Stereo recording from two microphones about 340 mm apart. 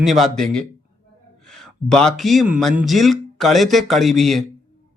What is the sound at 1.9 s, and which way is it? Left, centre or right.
Speech, centre.